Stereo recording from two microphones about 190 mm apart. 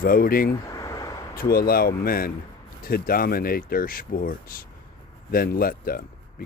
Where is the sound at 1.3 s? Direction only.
50° left (ahead or behind).